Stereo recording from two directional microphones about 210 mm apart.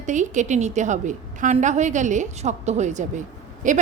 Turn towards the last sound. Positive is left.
turn(degrees=-35)  # may be behind; listen again after turning